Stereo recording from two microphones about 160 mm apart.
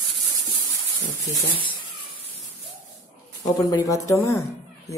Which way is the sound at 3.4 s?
25° left (ahead or behind).